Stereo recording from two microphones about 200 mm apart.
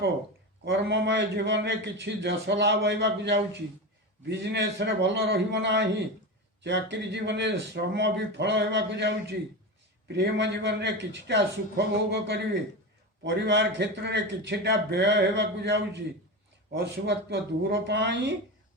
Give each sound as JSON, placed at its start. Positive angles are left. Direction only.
{"t": 0.6, "sound": "a man's voice", "side_deg": -60}